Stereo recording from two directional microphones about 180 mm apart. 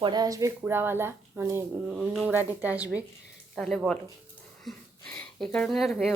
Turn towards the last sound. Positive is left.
turn(degrees=0)  # may be behind; listen again after turning